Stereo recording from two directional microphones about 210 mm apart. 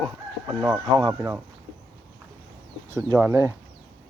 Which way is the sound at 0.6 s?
20° right (ahead or behind).